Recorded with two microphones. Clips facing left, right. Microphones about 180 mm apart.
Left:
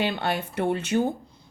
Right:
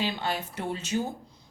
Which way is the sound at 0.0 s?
60° left (ahead or behind).